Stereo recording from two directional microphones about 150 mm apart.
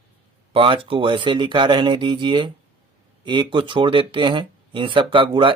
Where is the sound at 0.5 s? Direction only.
35° right (ahead or behind).